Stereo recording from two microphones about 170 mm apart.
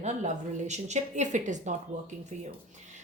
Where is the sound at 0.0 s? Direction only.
45° right (ahead or behind).